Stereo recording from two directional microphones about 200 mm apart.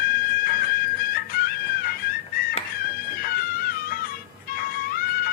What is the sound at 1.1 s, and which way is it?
Music, 45° left (ahead or behind).